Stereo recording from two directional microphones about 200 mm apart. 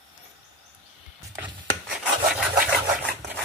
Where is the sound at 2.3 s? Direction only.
5° right (ahead or behind).